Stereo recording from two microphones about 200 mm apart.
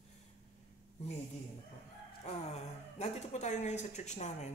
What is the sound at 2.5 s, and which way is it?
Speech, 30° left (ahead or behind).